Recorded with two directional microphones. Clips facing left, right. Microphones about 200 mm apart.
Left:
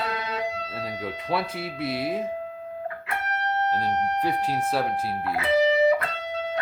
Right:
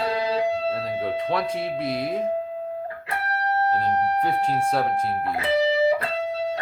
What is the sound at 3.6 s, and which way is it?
Speech, 30° right (ahead or behind).